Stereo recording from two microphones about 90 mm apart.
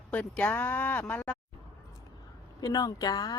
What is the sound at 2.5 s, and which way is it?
Speech, 50° left (ahead or behind).